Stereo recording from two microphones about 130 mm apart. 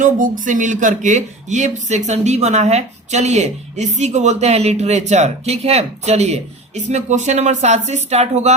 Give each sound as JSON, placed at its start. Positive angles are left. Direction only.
{"t": 0.0, "sound": "speech", "side_deg": -85}